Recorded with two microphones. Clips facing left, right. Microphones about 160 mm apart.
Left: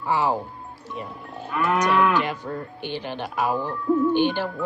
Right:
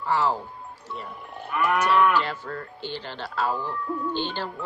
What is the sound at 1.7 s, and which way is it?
Moo, 15° left (ahead or behind).